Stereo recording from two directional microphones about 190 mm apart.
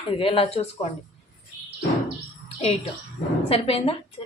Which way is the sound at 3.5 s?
30° left (ahead or behind).